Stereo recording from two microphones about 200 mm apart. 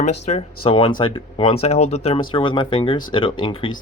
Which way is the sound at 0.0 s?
35° left (ahead or behind).